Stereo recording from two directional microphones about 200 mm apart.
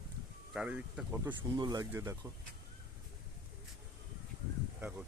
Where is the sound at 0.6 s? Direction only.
5° right (ahead or behind).